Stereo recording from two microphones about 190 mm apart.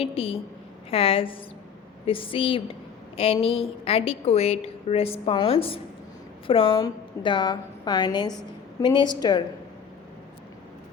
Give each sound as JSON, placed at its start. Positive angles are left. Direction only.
{"t": 0.0, "sound": "a woman's voice", "side_deg": 30}